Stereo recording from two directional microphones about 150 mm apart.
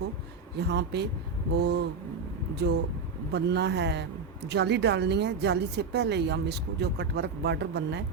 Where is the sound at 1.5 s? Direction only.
90° right.